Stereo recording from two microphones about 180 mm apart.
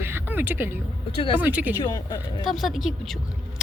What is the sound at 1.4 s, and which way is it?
Speech, 10° right (ahead or behind).